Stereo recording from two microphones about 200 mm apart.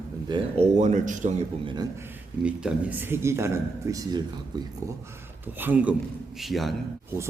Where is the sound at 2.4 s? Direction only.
5° right (ahead or behind).